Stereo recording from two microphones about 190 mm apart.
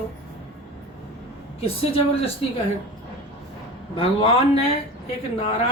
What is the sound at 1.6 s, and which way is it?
Speech, 30° left (ahead or behind).